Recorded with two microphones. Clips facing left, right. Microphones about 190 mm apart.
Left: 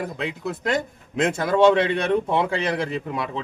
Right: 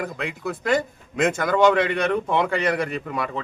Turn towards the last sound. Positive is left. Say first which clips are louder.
# even
turn(degrees=20)  # may be behind; listen again after turning